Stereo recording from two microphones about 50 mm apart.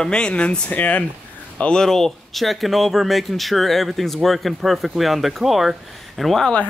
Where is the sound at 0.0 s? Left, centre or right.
Centre.